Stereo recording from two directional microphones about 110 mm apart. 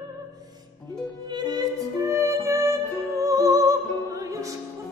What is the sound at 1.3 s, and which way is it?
Music, 40° right (ahead or behind).